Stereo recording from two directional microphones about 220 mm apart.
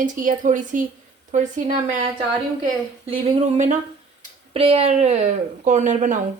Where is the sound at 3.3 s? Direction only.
30° right (ahead or behind).